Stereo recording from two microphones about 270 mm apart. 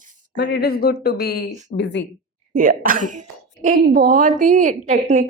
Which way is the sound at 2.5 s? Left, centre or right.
Right.